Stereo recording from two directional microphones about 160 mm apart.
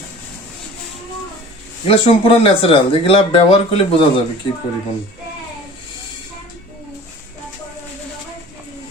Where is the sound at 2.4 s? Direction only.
35° left (ahead or behind).